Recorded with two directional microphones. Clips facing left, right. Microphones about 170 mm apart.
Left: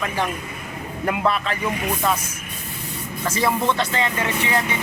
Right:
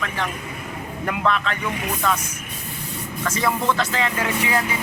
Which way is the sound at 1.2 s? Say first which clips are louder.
Right 1 dB; 5° left (ahead or behind).